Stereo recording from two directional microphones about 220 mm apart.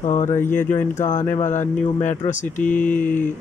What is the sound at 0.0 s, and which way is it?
Speech, 35° left (ahead or behind).